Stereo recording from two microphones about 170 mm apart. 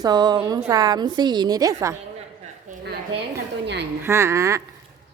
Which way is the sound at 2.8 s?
75° right (ahead or behind).